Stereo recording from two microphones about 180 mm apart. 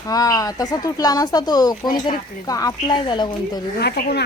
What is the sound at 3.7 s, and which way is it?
Speech, 65° left (ahead or behind).